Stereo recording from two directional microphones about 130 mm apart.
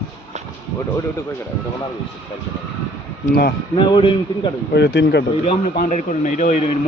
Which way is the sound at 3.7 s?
40° left (ahead or behind).